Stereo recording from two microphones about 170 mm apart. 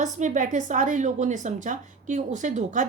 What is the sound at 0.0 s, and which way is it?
A woman's voice, 45° right (ahead or behind).